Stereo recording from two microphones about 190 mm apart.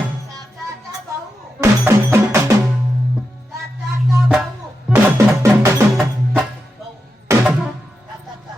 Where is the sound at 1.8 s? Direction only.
15° right (ahead or behind).